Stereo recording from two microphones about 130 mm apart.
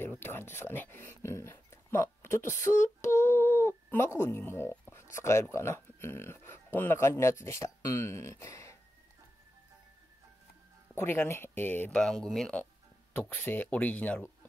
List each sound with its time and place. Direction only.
0.0 s speech: 15° left (ahead or behind)
11.0 s speech: 20° left (ahead or behind)
12.0 s speech: 5° left (ahead or behind)
13.1 s speech: 15° left (ahead or behind)